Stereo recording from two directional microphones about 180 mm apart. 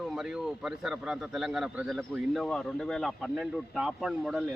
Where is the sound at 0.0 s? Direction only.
Centre (ahead or behind).